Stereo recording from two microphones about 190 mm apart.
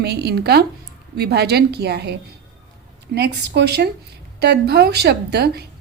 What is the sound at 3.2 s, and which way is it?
A woman's voice, 60° right (ahead or behind).